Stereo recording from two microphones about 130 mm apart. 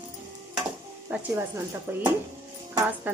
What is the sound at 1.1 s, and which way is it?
Speech, 15° right (ahead or behind).